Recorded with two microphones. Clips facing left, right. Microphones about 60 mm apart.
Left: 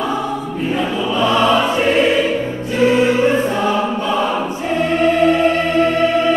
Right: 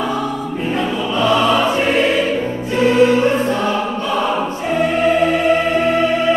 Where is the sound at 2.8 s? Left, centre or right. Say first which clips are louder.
Right 1 dB; centre.